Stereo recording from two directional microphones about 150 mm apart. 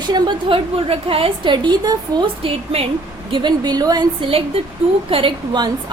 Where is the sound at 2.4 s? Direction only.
40° right (ahead or behind).